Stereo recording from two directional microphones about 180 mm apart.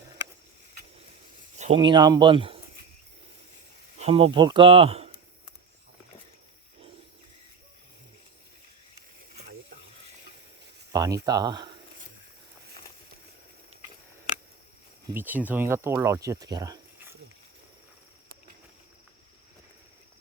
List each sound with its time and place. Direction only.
1.5 s a sound: 40° right (ahead or behind)
1.8 s speech: 25° right (ahead or behind)
3.9 s speech: 35° right (ahead or behind)
10.9 s speech: 20° right (ahead or behind)
15.1 s speech: 10° right (ahead or behind)